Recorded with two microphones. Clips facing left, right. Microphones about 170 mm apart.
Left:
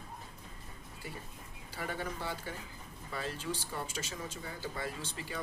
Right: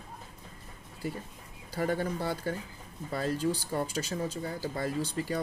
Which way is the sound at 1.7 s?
40° right (ahead or behind).